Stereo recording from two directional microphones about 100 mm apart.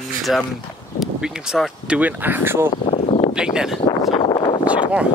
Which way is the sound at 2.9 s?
90° left.